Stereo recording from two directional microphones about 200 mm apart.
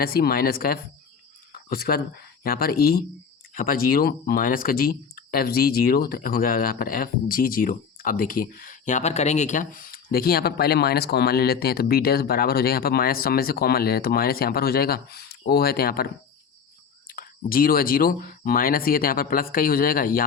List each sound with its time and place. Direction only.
0.0 s speech: 50° left (ahead or behind)
17.1 s speech: 45° left (ahead or behind)